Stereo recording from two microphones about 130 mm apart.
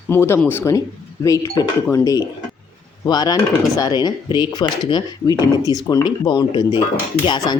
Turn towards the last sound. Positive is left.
turn(degrees=35)  # may be behind; listen again after turning